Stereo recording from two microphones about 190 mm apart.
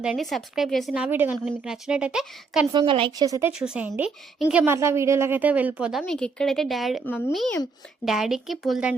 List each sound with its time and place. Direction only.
0.0 s a woman's voice: centre (ahead or behind)
2.7 s speech: 25° right (ahead or behind)
3.6 s a woman's voice: 5° right (ahead or behind)